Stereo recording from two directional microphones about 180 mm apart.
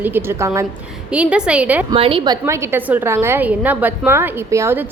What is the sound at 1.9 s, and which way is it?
A woman's voice, 30° right (ahead or behind).